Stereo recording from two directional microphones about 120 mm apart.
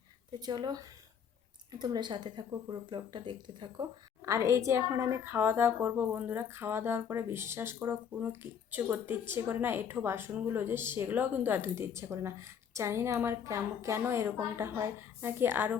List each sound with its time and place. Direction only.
0.3 s speech: 35° right (ahead or behind)
4.2 s a woman's voice: 25° right (ahead or behind)